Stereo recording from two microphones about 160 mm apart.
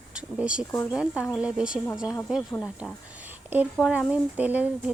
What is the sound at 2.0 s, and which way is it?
Speech, 20° left (ahead or behind).